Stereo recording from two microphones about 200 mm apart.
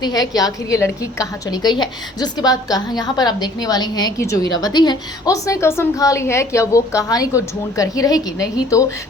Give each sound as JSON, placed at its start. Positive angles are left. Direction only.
{"t": 0.0, "sound": "a woman's voice", "side_deg": 20}